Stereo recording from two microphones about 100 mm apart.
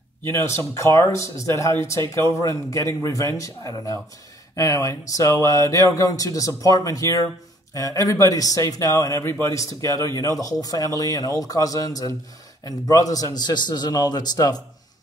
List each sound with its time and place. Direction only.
0.2 s a man's voice: 25° left (ahead or behind); by 14.6 s 40° left (ahead or behind)